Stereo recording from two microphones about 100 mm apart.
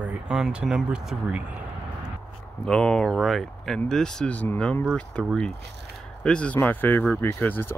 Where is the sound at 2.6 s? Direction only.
10° left (ahead or behind).